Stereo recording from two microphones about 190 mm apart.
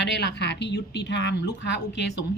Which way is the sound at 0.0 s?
65° left (ahead or behind).